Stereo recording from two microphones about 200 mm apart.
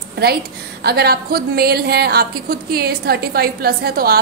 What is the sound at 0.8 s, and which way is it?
A woman's voice, 50° right (ahead or behind).